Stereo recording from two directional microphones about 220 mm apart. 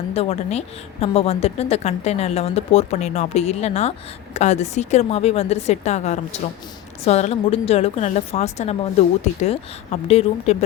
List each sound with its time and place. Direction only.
0.1 s a woman's voice: 25° left (ahead or behind)